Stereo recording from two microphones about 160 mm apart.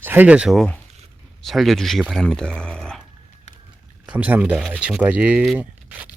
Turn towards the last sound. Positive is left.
turn(degrees=-5)  # may be behind; listen again after turning